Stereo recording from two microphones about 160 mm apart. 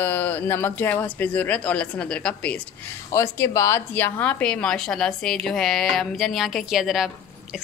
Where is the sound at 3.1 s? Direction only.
15° left (ahead or behind).